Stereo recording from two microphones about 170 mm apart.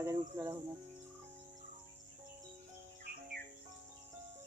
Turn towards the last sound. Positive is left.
turn(degrees=-60)  # may be behind; listen again after turning